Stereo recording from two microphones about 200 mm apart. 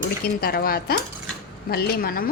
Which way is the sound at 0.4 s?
50° left (ahead or behind).